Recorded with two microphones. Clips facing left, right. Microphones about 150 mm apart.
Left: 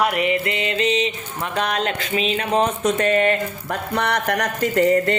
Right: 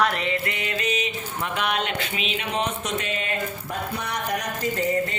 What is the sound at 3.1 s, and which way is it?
Speech, 70° left (ahead or behind).